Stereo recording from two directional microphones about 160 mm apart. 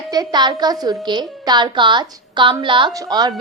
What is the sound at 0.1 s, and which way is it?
A woman's voice, 25° right (ahead or behind).